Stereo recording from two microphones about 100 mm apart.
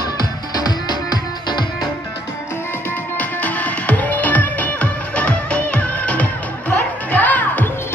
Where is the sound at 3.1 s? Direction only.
15° left (ahead or behind).